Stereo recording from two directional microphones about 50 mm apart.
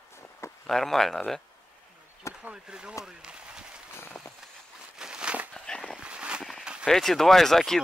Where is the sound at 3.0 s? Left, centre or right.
Centre.